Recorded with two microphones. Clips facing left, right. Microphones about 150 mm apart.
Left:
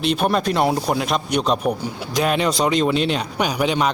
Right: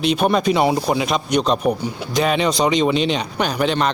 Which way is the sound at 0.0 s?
Centre (ahead or behind).